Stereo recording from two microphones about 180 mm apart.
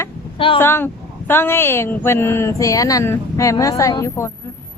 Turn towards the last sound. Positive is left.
turn(degrees=15)  # may be behind; listen again after turning